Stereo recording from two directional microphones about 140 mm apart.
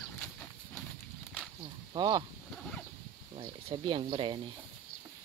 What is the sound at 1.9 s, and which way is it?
Speech, 30° right (ahead or behind).